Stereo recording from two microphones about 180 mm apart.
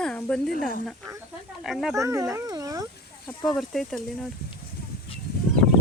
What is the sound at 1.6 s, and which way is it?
Speech, centre (ahead or behind).